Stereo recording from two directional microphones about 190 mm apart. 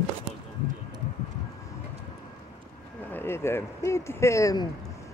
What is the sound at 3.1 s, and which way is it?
A woman's voice, 10° left (ahead or behind).